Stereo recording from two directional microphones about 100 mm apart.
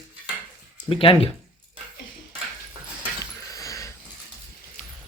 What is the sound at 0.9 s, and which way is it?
Speech, 65° left (ahead or behind).